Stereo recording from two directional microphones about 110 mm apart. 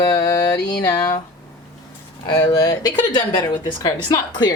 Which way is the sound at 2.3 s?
35° left (ahead or behind).